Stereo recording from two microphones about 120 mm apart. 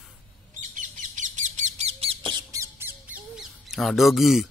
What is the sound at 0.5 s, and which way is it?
Bird, 90° right.